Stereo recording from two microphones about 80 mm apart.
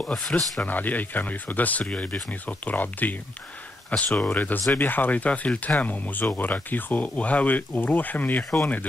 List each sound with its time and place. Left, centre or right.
0.3 s speech: centre